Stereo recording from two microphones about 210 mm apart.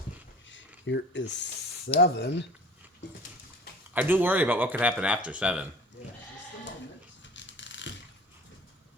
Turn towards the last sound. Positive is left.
turn(degrees=60)  # may be behind; listen again after turning